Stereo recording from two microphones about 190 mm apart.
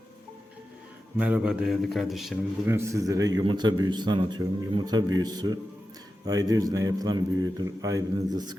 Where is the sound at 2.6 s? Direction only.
15° right (ahead or behind).